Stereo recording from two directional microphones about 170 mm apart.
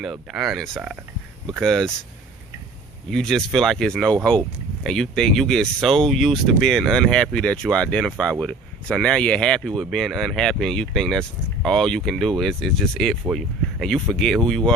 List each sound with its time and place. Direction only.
0.0 s speech: centre (ahead or behind)
3.1 s speech: 5° left (ahead or behind)